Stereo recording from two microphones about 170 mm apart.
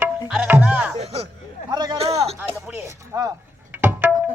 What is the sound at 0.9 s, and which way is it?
Music, 35° right (ahead or behind).